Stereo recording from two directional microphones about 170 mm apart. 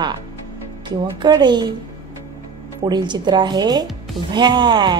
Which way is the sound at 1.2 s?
25° right (ahead or behind).